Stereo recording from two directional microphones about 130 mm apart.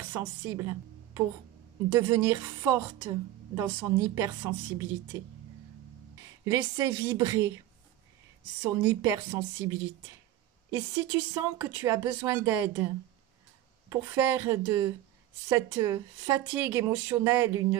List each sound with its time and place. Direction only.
0.5 s a woman's voice: 25° right (ahead or behind)
6.4 s speech: 25° right (ahead or behind)
8.6 s speech: 20° right (ahead or behind)
13.8 s speech: 20° right (ahead or behind)